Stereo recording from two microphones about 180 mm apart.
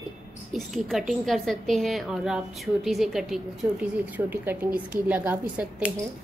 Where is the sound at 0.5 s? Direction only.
Centre (ahead or behind).